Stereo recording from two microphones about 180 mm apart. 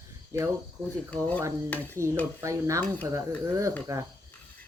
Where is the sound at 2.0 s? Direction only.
15° right (ahead or behind).